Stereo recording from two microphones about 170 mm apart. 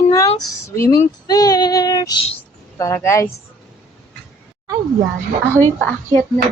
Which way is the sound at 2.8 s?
15° left (ahead or behind).